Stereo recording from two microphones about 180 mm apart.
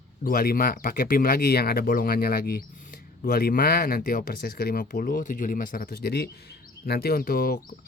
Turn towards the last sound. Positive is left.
turn(degrees=55)  # may be behind; listen again after turning